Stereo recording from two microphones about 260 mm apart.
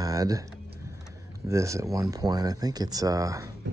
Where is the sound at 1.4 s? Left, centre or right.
Centre.